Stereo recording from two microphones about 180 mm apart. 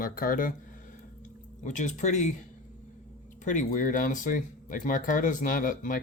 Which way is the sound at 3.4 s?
45° left (ahead or behind).